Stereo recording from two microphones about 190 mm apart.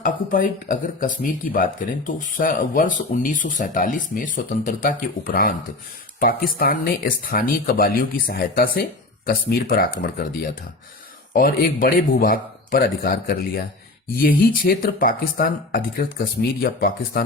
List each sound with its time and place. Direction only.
0.0 s speech: 45° left (ahead or behind)